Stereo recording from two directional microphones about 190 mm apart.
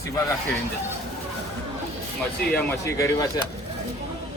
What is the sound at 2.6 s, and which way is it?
Speech, 15° left (ahead or behind).